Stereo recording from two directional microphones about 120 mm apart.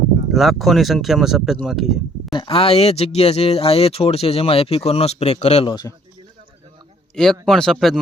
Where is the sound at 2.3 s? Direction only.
45° left (ahead or behind); by 5.6 s 65° left (ahead or behind).